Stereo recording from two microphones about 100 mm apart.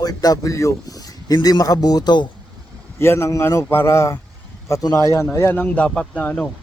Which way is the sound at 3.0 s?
25° left (ahead or behind).